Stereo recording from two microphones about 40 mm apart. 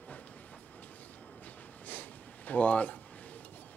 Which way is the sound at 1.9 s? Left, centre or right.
Left.